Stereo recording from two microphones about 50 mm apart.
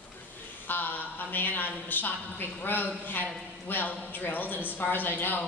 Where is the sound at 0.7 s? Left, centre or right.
Left.